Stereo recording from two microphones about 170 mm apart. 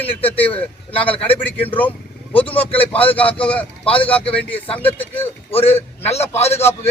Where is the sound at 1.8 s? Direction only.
10° left (ahead or behind).